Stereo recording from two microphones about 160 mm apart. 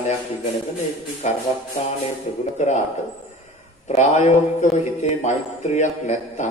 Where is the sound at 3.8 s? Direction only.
45° left (ahead or behind).